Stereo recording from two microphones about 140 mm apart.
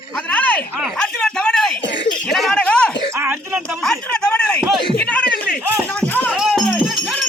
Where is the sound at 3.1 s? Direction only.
20° right (ahead or behind).